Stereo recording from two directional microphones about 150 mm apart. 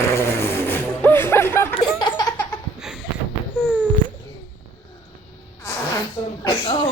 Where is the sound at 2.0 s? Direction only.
30° left (ahead or behind).